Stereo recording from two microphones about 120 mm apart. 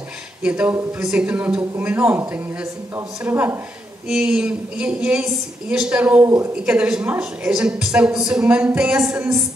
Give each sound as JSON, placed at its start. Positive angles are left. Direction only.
{"t": 0.4, "sound": "a woman's voice", "side_deg": -10}
{"t": 3.3, "sound": "a woman's voice", "side_deg": -15}